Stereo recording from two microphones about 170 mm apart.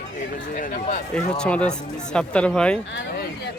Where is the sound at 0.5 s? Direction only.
55° left (ahead or behind).